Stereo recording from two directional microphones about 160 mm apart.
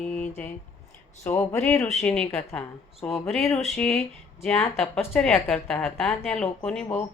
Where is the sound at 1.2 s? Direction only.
15° left (ahead or behind).